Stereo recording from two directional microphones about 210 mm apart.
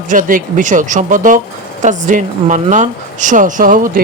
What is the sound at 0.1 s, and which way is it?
A man's voice, 40° right (ahead or behind).